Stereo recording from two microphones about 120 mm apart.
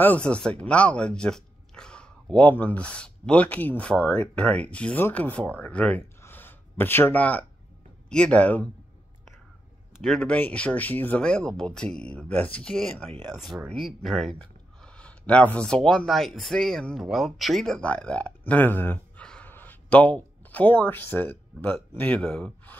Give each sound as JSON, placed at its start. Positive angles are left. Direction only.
{"t": 0.0, "sound": "speech", "side_deg": 10}
{"t": 10.0, "sound": "speech", "side_deg": 10}